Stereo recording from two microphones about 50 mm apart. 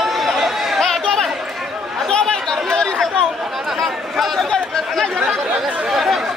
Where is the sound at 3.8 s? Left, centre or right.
Centre.